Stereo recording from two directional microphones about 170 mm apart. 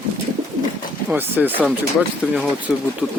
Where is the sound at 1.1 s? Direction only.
10° right (ahead or behind).